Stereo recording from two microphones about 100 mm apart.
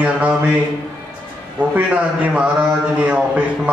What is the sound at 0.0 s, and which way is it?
Speech, 15° right (ahead or behind).